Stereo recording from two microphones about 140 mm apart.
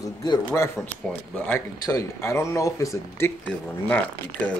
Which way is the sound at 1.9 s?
25° left (ahead or behind).